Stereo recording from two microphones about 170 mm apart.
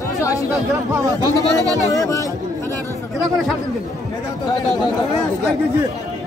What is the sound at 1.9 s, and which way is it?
Speech, 20° left (ahead or behind).